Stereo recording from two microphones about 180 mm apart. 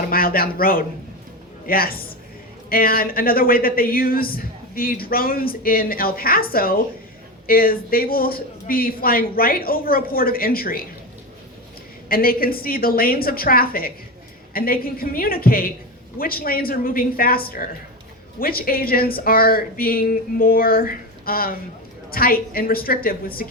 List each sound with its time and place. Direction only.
0.1 s speech: 55° left (ahead or behind)
12.0 s a woman's voice: 55° left (ahead or behind)